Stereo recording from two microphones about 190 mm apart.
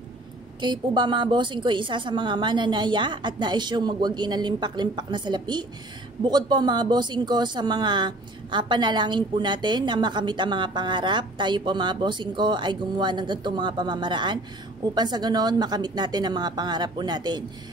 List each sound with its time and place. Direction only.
0.6 s speech: 25° right (ahead or behind)